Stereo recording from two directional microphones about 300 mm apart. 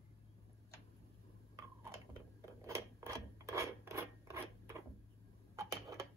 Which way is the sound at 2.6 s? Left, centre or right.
Centre.